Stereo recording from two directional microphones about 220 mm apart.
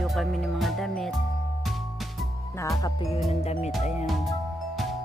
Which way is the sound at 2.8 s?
20° left (ahead or behind).